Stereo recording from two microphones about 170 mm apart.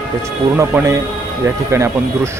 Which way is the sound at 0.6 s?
15° right (ahead or behind).